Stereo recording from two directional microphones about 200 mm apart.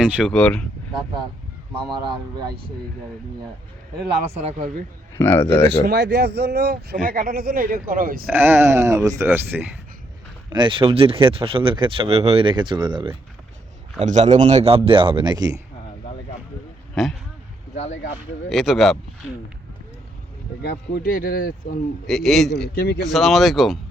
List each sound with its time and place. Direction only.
0.0 s speech: 5° right (ahead or behind)
1.9 s speech: 20° right (ahead or behind)
4.4 s a man's voice: 30° right (ahead or behind)
5.1 s speech: 10° left (ahead or behind)
5.6 s speech: 60° right (ahead or behind)
8.3 s speech: 10° right (ahead or behind)
10.5 s speech: 25° right (ahead or behind)
14.0 s a man's voice: 35° right (ahead or behind); by 15.5 s 20° right (ahead or behind)
16.9 s speech: centre (ahead or behind)
18.4 s speech: centre (ahead or behind)
20.6 s speech: 50° left (ahead or behind)
22.0 s speech: centre (ahead or behind)
22.7 s speech: 50° left (ahead or behind)
23.0 s speech: centre (ahead or behind)